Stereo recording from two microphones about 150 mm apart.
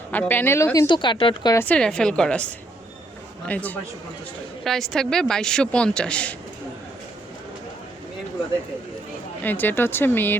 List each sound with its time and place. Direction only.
0.1 s speech: 15° left (ahead or behind)
0.9 s speech: 30° left (ahead or behind)
1.5 s speech: 10° left (ahead or behind)
9.4 s speech: 10° left (ahead or behind)